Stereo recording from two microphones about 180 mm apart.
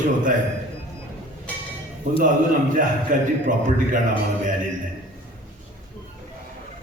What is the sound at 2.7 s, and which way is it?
Speech, 50° right (ahead or behind).